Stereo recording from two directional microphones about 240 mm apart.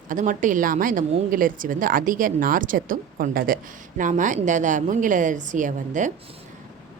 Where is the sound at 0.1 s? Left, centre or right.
Right.